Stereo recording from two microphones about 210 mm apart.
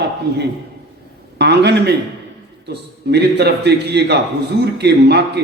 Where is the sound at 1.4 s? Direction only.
50° right (ahead or behind).